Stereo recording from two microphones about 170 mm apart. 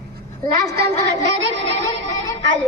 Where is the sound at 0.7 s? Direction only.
75° right (ahead or behind).